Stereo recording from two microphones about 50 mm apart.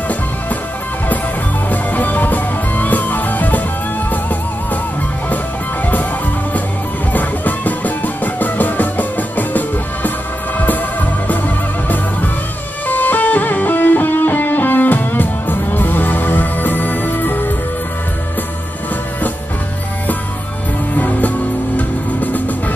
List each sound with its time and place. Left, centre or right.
1.7 s music: left
7.1 s music: left
11.2 s music: left
20.9 s music: left